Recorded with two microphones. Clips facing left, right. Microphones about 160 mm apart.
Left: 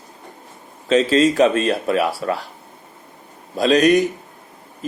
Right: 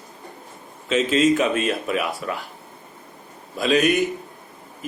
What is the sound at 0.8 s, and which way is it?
Speech, 35° left (ahead or behind).